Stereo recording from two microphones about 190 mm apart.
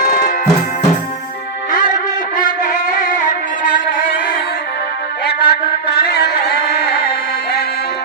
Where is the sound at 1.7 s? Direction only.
45° left (ahead or behind).